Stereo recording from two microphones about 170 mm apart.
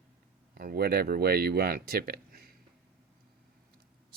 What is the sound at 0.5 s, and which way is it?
Speech, 60° right (ahead or behind).